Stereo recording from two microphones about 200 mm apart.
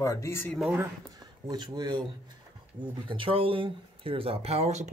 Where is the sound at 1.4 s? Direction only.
20° right (ahead or behind).